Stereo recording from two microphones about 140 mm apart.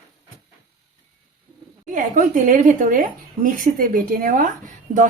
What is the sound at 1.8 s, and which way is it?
Speech, 65° right (ahead or behind).